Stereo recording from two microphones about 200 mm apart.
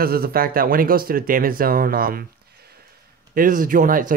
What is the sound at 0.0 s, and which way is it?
Speech, 50° right (ahead or behind).